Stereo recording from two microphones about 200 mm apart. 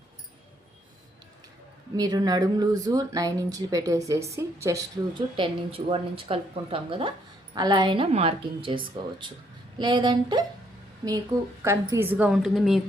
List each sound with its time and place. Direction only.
2.0 s speech: 20° right (ahead or behind)
11.6 s a woman's voice: 15° right (ahead or behind)